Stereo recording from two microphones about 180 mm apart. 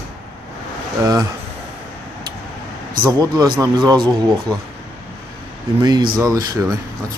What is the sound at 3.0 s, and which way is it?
Speech, 20° right (ahead or behind).